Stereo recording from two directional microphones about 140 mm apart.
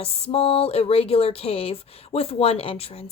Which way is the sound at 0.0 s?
45° left (ahead or behind).